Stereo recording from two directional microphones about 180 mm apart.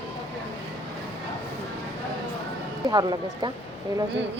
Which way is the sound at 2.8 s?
25° right (ahead or behind).